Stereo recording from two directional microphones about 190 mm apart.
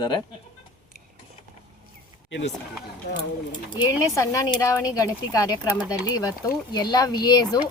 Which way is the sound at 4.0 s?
20° left (ahead or behind).